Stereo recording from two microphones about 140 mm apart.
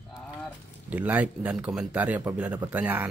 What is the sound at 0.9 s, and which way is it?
Speech, 10° right (ahead or behind).